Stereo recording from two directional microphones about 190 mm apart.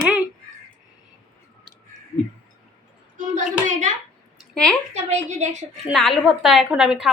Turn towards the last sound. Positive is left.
turn(degrees=-5)  # may be behind; listen again after turning